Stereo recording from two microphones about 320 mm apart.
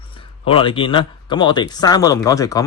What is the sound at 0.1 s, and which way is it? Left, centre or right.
Speech, centre.